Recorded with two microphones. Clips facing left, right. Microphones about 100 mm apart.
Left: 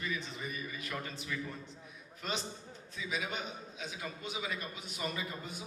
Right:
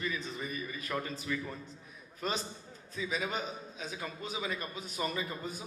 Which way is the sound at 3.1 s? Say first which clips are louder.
Right 2 dB; 40° right (ahead or behind).